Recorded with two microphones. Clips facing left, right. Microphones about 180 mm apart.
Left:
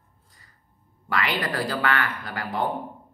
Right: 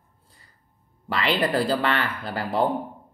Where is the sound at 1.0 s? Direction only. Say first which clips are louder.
Right 3 dB; 25° right (ahead or behind).